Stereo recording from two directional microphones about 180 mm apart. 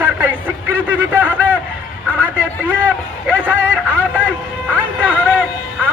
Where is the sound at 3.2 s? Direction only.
10° right (ahead or behind).